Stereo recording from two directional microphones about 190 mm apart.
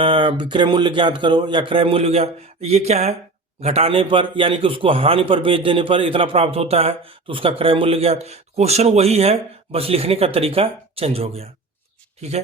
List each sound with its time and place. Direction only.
0.0 s a man's voice: 30° right (ahead or behind)